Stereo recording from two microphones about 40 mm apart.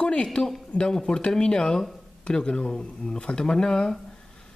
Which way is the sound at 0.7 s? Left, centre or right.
Left.